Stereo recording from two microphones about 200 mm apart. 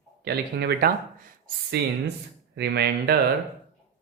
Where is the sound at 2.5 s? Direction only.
55° right (ahead or behind).